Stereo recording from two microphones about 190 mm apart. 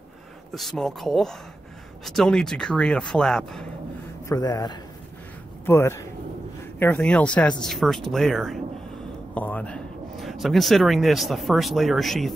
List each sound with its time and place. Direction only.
0.6 s speech: centre (ahead or behind)
4.3 s a man's voice: 20° left (ahead or behind); by 12.4 s centre (ahead or behind)